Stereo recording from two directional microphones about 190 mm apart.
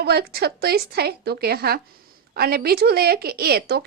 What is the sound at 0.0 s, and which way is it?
Speech, 55° right (ahead or behind).